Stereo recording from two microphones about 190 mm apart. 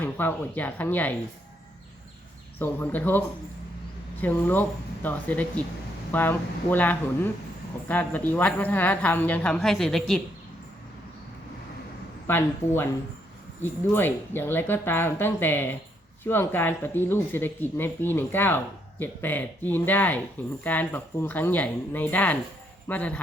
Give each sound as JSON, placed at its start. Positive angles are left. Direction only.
{"t": 0.0, "sound": "speech", "side_deg": 10}
{"t": 2.6, "sound": "speech", "side_deg": 10}
{"t": 12.3, "sound": "speech", "side_deg": 10}